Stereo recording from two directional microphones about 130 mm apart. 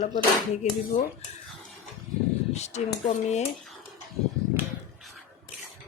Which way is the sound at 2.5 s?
60° left (ahead or behind).